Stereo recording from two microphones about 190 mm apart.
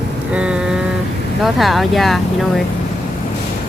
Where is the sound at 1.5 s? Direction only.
Centre (ahead or behind).